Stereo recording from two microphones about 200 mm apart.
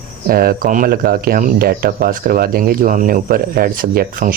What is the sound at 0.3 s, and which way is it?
Speech, 45° right (ahead or behind).